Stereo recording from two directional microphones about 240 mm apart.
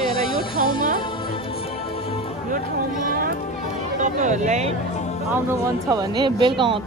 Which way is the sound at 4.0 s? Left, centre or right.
Right.